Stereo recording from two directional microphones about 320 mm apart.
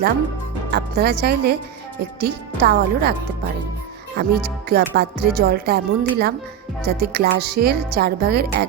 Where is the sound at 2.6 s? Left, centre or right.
Right.